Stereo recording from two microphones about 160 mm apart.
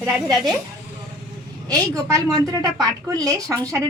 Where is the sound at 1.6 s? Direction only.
20° right (ahead or behind).